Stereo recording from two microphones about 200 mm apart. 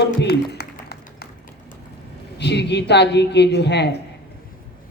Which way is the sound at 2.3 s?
60° left (ahead or behind).